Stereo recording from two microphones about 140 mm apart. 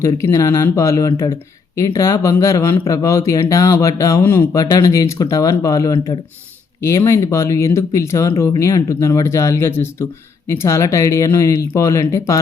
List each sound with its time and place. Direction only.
0.0 s speech: 20° left (ahead or behind)